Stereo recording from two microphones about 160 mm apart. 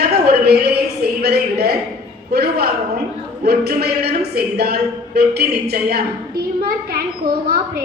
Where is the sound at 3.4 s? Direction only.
80° right.